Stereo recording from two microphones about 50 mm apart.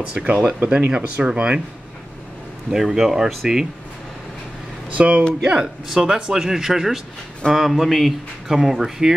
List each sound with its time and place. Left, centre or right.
0.2 s speech: right
2.7 s speech: centre
4.9 s speech: right
5.4 s speech: centre